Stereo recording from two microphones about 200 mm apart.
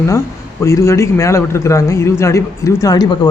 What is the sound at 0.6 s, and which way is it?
Speech, 15° left (ahead or behind).